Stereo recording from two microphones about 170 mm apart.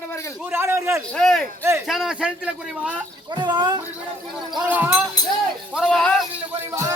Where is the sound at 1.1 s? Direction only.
5° left (ahead or behind).